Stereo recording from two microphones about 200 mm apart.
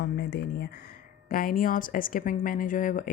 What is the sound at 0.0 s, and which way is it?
Speech, 60° left (ahead or behind).